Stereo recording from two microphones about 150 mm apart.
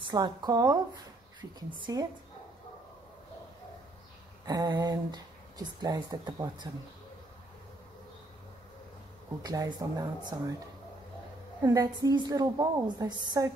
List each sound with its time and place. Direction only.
0.0 s speech: 30° right (ahead or behind)
1.8 s speech: 25° right (ahead or behind)
4.5 s speech: 30° right (ahead or behind)
9.4 s speech: 25° right (ahead or behind)
11.6 s speech: 25° right (ahead or behind)